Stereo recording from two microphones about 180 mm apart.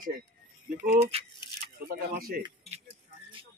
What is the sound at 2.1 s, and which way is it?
Speech, 55° right (ahead or behind).